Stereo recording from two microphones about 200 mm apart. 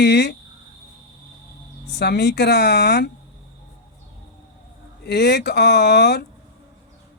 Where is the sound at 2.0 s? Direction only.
55° left (ahead or behind).